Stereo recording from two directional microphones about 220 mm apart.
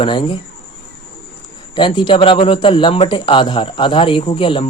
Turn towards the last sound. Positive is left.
turn(degrees=25)  # may be behind; listen again after turning